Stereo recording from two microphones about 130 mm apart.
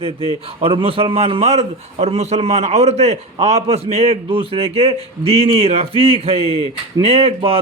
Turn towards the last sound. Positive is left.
turn(degrees=-50)  # may be behind; listen again after turning